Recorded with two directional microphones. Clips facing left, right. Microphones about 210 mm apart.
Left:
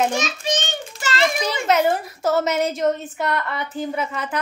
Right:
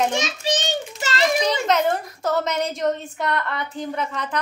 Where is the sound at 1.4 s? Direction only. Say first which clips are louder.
Left 1 dB; 5° left (ahead or behind).